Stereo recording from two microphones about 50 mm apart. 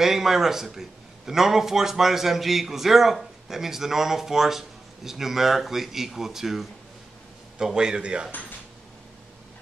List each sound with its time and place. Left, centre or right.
0.0 s a man's voice: centre